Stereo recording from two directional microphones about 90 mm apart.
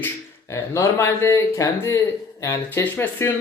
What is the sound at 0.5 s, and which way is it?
Speech, 35° left (ahead or behind).